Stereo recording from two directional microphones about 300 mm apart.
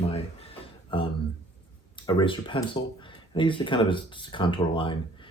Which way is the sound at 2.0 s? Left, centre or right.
Centre.